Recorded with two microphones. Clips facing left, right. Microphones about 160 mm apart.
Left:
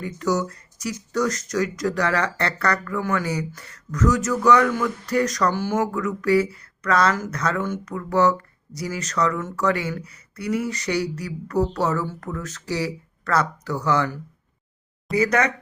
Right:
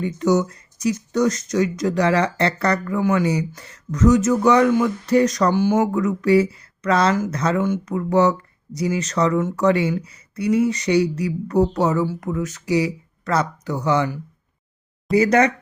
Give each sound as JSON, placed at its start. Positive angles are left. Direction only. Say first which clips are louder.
{"t": 0.0, "sound": "speech", "louder": "right 5 dB", "side_deg": -20}
{"t": 15.1, "sound": "speech", "louder": "right 5 dB", "side_deg": -30}